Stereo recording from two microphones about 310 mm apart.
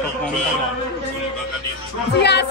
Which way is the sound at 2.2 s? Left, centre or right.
Left.